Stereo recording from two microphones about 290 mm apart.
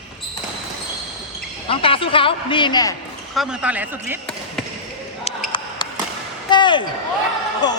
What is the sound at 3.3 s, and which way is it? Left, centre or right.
Speech, centre.